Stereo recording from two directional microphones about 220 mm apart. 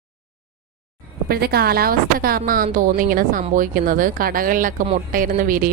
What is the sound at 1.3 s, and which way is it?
A woman's voice, 45° right (ahead or behind).